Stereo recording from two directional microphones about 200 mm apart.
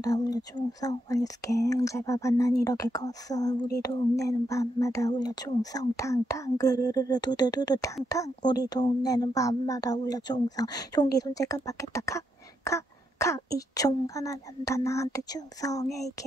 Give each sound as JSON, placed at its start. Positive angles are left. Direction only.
{"t": 0.0, "sound": "speech", "side_deg": 20}